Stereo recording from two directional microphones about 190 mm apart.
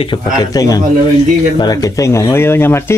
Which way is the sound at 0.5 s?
20° left (ahead or behind).